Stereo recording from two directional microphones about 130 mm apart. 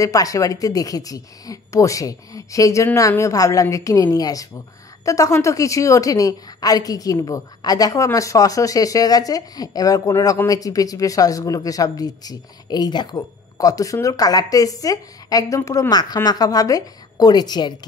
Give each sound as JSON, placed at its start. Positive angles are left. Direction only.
{"t": 0.0, "sound": "speech", "side_deg": 25}